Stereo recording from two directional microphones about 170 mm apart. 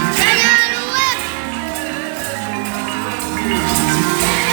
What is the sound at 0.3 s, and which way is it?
Children playing, 5° right (ahead or behind).